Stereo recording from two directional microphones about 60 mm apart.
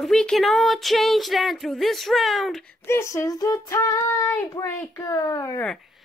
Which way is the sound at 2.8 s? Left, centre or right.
Left.